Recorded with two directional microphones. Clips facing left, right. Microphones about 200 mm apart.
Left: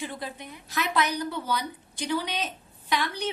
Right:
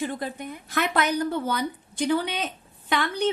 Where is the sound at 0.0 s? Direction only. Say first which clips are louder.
Right 6 dB; 50° right (ahead or behind).